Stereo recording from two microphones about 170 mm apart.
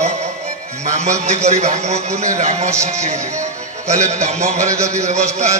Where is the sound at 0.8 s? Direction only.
45° right (ahead or behind).